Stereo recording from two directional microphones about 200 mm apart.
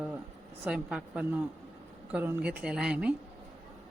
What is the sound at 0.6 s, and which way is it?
A woman's voice, 5° right (ahead or behind).